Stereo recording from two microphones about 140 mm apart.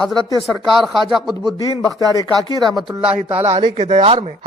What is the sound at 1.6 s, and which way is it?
Speech, 25° left (ahead or behind).